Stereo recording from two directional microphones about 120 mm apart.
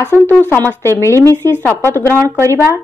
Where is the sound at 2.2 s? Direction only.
25° right (ahead or behind).